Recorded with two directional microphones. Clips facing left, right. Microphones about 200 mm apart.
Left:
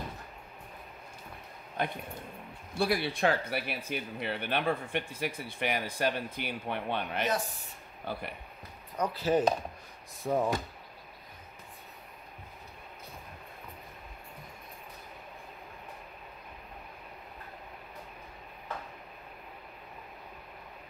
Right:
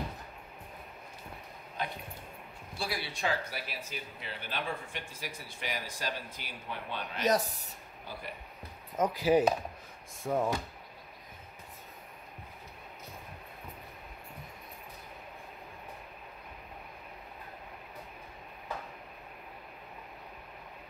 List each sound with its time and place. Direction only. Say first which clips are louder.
1.8 s speech: left 4 dB; 55° left (ahead or behind)
7.2 s speech: right 4 dB; 40° right (ahead or behind)
8.0 s speech: left 7 dB; 60° left (ahead or behind)
8.9 s speech: right 2 dB; 15° right (ahead or behind)
10.2 s speech: left 1 dB; centre (ahead or behind)